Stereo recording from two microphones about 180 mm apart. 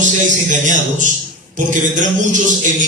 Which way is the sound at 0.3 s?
45° right (ahead or behind).